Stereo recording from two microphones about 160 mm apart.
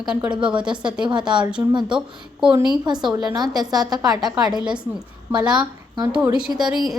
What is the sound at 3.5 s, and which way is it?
Speech, 25° right (ahead or behind).